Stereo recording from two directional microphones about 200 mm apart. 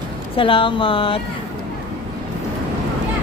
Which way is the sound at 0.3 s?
25° left (ahead or behind).